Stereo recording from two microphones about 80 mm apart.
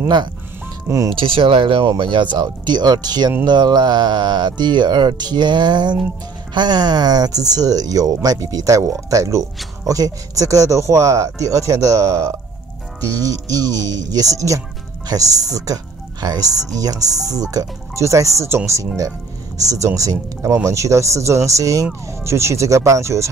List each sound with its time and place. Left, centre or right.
0.8 s speech: right
1.1 s speech: right
2.0 s speech: right
19.7 s speech: right